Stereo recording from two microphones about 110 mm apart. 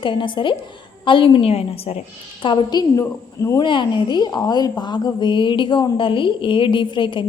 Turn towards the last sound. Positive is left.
turn(degrees=50)  # may be behind; listen again after turning